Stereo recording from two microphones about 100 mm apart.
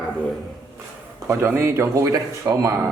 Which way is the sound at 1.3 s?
30° right (ahead or behind).